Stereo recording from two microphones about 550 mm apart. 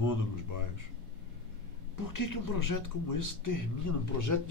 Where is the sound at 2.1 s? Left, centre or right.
Left.